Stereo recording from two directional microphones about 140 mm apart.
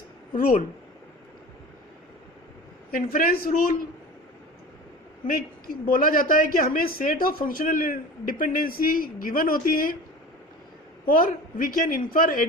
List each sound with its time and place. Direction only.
2.9 s speech: 90° left
5.3 s speech: 90° left
11.0 s speech: 90° left